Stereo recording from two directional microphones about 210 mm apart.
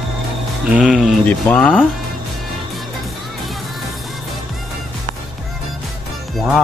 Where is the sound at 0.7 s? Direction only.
5° right (ahead or behind).